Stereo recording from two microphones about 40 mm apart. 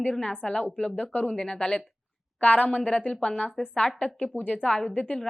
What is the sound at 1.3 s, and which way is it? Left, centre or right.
Speech, centre.